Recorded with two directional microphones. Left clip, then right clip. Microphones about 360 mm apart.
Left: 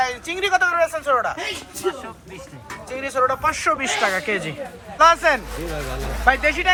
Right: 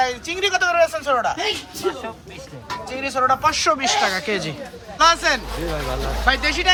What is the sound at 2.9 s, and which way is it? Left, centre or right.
Speech, centre.